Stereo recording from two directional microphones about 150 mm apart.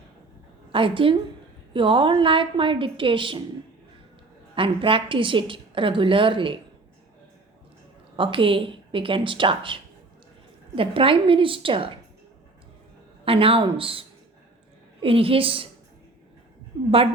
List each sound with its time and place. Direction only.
0.7 s a woman's voice: 35° right (ahead or behind)
4.5 s a woman's voice: 35° right (ahead or behind)
8.1 s a woman's voice: 35° right (ahead or behind)
10.8 s a woman's voice: 35° right (ahead or behind)
13.2 s a woman's voice: 40° right (ahead or behind)
15.0 s a woman's voice: 40° right (ahead or behind)